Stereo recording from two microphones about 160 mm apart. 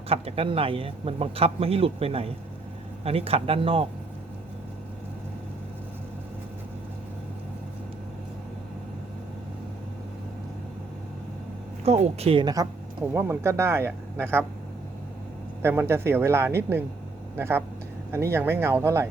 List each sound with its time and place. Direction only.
0.1 s speech: 35° right (ahead or behind)
11.9 s speech: 40° right (ahead or behind)
13.1 s speech: 15° right (ahead or behind)
15.6 s speech: 15° right (ahead or behind)